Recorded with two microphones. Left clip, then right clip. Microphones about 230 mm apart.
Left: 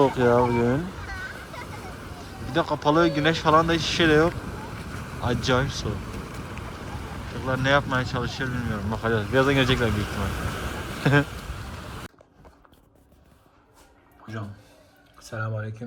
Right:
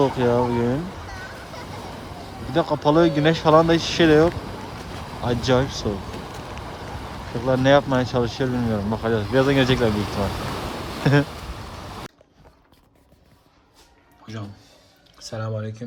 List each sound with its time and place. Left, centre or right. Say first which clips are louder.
0.0 s speech: even; centre
0.7 s speech: even; centre
1.2 s vehicle: right 1 dB; right
1.9 s a sound: right 4 dB; right
2.5 s speech: right 3 dB; centre
7.3 s speech: right 5 dB; right
10.2 s a sound: right 4 dB; right
11.0 s speech: right 1 dB; centre
15.2 s speech: right 3 dB; centre